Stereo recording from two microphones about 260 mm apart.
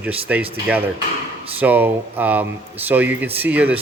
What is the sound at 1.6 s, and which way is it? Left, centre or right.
Speech, centre.